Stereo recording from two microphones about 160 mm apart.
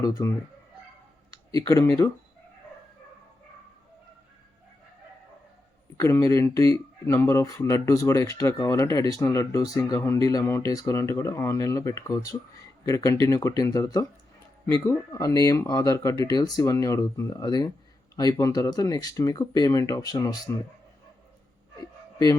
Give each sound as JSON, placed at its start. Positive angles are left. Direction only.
{"t": 0.0, "sound": "speech", "side_deg": 20}
{"t": 1.5, "sound": "speech", "side_deg": 20}
{"t": 6.0, "sound": "speech", "side_deg": 20}